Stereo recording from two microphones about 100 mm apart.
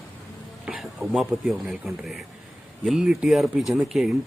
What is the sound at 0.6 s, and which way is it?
Speech, centre (ahead or behind).